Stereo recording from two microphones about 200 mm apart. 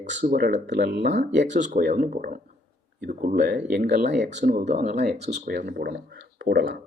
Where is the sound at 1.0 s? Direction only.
65° right (ahead or behind).